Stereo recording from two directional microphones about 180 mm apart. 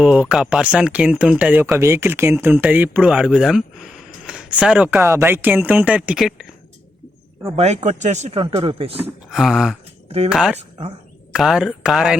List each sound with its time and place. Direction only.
0.0 s speech: 5° right (ahead or behind)
7.5 s speech: 40° right (ahead or behind)
9.3 s speech: centre (ahead or behind)